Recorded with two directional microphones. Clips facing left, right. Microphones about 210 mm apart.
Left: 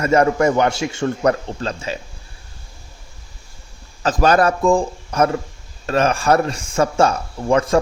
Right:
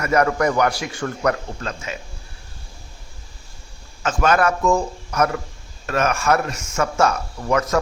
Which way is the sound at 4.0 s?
35° left (ahead or behind).